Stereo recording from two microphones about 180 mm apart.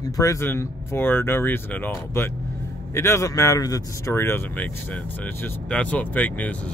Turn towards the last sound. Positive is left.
turn(degrees=10)  # may be behind; listen again after turning